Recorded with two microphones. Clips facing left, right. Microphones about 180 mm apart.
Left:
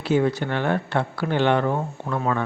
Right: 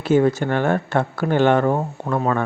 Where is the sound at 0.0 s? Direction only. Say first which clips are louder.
Right 4 dB; 50° right (ahead or behind).